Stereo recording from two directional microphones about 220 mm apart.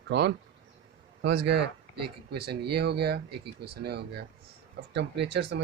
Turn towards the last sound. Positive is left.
turn(degrees=-50)  # may be behind; listen again after turning